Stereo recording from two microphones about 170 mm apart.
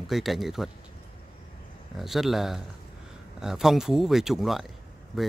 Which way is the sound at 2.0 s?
Centre (ahead or behind).